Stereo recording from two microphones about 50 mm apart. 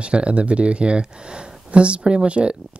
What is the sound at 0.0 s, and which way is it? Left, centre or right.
Speech, right.